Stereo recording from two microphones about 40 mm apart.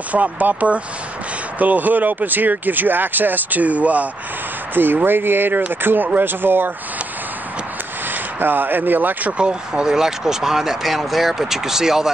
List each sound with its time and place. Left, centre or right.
0.1 s speech: right
5.0 s speech: right
8.1 s speech: right
9.4 s speech: right